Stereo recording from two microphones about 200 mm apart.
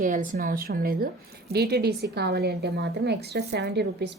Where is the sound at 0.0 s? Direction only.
40° right (ahead or behind).